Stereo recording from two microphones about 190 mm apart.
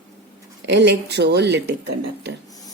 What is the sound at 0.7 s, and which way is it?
Speech, 60° right (ahead or behind).